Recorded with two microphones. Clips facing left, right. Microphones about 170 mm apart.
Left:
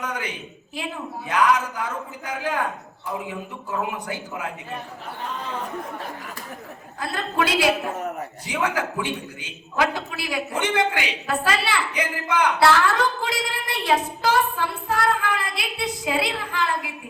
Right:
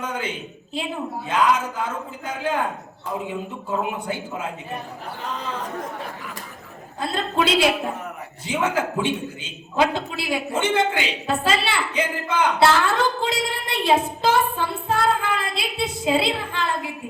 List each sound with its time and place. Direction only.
0.0 s a man's voice: 25° right (ahead or behind)
7.0 s a man's voice: 25° right (ahead or behind)